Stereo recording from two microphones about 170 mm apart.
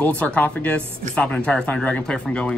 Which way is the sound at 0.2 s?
10° left (ahead or behind).